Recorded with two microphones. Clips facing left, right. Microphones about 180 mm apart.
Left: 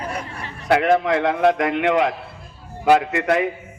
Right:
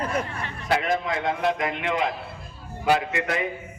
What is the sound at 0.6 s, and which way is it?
A woman's voice, 60° left (ahead or behind).